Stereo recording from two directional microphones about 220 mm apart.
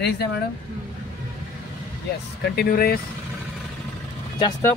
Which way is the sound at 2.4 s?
45° left (ahead or behind).